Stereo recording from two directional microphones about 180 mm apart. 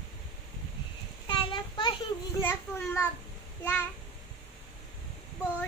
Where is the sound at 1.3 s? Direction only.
25° left (ahead or behind).